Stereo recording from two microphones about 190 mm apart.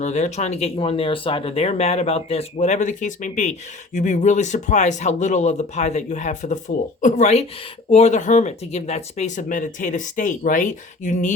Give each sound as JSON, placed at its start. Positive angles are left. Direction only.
{"t": 0.0, "sound": "speech", "side_deg": 40}